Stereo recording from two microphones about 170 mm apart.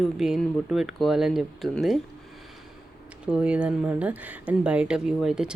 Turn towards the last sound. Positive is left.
turn(degrees=-5)  # may be behind; listen again after turning